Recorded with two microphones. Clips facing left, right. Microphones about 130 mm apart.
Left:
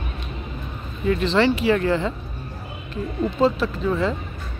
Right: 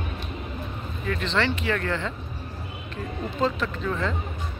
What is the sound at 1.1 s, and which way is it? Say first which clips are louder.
Speech: left 7 dB; 10° left (ahead or behind).